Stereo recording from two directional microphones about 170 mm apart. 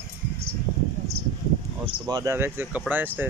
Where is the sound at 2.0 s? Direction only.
20° right (ahead or behind).